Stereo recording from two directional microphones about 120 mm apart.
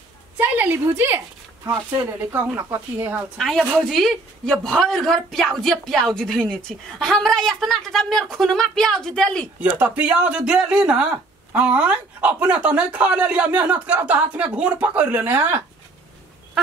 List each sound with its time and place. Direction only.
0.4 s a sound: 15° right (ahead or behind)
2.3 s speech: 15° right (ahead or behind)
3.3 s a woman's voice: centre (ahead or behind)
9.6 s speech: 15° right (ahead or behind)